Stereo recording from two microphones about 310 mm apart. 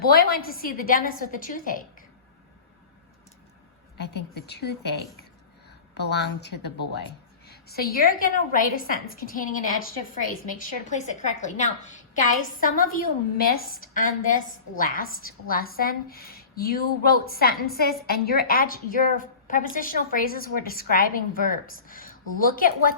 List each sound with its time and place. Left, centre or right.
0.0 s a woman's voice: left
3.9 s a woman's voice: left
6.0 s a woman's voice: left